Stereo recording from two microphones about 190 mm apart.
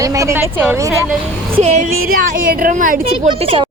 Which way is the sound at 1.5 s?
35° right (ahead or behind).